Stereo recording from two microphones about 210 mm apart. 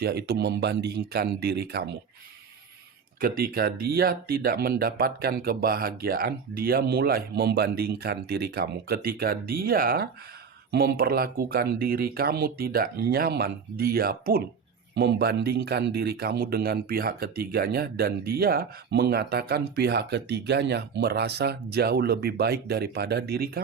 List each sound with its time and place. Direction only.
0.0 s speech: 50° right (ahead or behind)
3.2 s speech: 45° right (ahead or behind)